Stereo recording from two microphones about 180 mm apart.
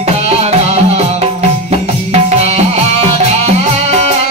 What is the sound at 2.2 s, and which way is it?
Music, 35° right (ahead or behind).